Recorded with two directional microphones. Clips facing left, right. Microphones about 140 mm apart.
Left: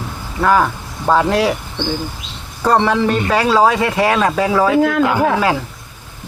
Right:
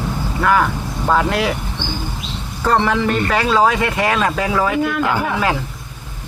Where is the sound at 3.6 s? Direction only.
30° left (ahead or behind).